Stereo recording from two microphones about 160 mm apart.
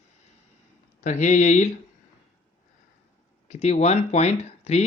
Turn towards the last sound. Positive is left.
turn(degrees=45)  # may be behind; listen again after turning